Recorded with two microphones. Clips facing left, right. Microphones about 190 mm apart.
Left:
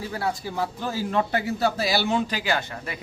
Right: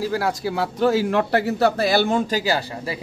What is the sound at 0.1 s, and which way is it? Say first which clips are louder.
A man's voice: right 5 dB; 90° right.